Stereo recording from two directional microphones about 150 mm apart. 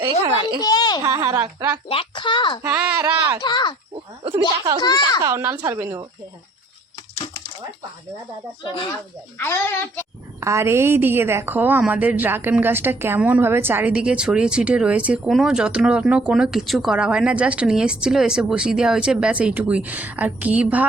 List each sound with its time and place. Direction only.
0.0 s a sound: 15° right (ahead or behind)
0.6 s a child's voice: 25° left (ahead or behind)
1.1 s a woman's voice: 20° right (ahead or behind)
1.9 s speech: 35° left (ahead or behind)
2.6 s a woman's voice: 10° right (ahead or behind)
3.0 s a woman's voice: 30° right (ahead or behind)
3.4 s a child's voice: 30° left (ahead or behind)
4.8 s a child's voice: 25° left (ahead or behind)
5.2 s a woman's voice: 20° right (ahead or behind)
9.4 s a child's voice: 15° left (ahead or behind)
10.4 s a woman's voice: 20° right (ahead or behind)